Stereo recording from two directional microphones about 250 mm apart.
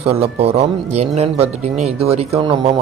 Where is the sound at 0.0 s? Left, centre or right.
Right.